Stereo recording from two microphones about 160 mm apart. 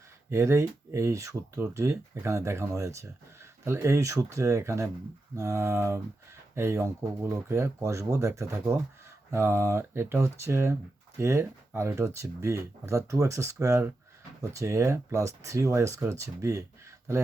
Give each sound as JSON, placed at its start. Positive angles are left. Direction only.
{"t": 0.3, "sound": "speech", "side_deg": -15}